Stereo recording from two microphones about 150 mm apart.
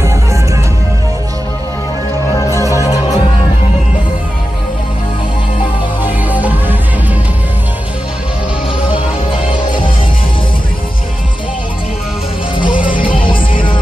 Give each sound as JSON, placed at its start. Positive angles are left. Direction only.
{"t": 2.3, "sound": "music", "side_deg": 20}
{"t": 6.2, "sound": "music", "side_deg": -10}
{"t": 12.5, "sound": "music", "side_deg": 65}